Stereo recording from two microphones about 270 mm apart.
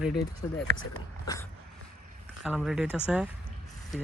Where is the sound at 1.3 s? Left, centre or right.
Centre.